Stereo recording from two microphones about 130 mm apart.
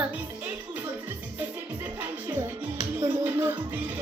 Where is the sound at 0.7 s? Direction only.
15° right (ahead or behind).